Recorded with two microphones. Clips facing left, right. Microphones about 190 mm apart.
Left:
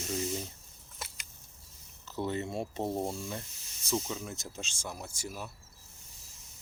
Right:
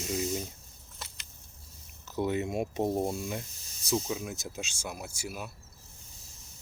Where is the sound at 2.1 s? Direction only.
15° right (ahead or behind).